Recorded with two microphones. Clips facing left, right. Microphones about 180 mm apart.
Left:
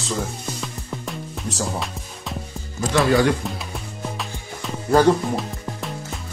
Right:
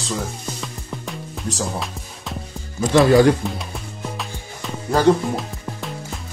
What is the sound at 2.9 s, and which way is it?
Speech, 40° right (ahead or behind).